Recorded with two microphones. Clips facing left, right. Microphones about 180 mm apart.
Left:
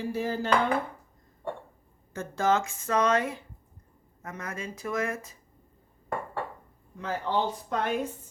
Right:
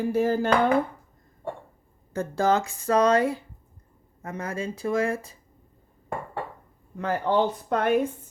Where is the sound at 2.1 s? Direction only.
35° right (ahead or behind).